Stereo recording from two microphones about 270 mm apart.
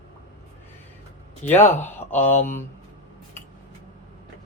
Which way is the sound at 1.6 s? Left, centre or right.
Left.